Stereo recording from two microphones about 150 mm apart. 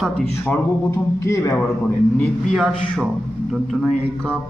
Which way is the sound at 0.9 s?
20° left (ahead or behind).